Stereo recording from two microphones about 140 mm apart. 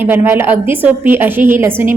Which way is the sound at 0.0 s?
15° right (ahead or behind).